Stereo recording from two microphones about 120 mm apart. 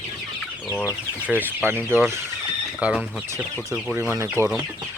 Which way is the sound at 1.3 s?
15° right (ahead or behind).